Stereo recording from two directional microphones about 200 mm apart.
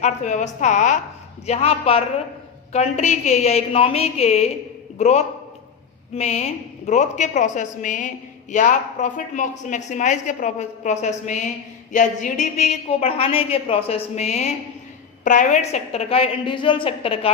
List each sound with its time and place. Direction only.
0.0 s a woman's voice: 35° left (ahead or behind)